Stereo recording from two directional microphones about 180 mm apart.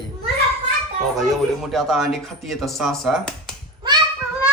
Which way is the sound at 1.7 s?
Centre (ahead or behind).